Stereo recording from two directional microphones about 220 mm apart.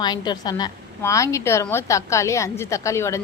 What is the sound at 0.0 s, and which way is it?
A woman's voice, 20° left (ahead or behind).